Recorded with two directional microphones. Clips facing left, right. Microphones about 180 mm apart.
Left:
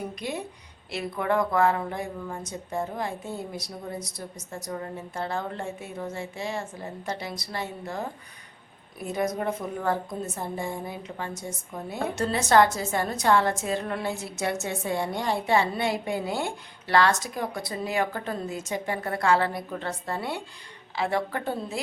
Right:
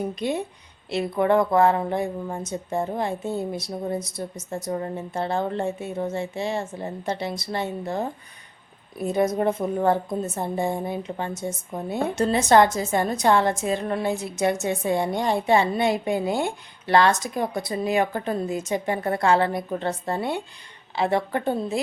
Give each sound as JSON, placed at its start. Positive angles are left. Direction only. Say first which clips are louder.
{"t": 0.2, "sound": "speech", "louder": "right 6 dB", "side_deg": -25}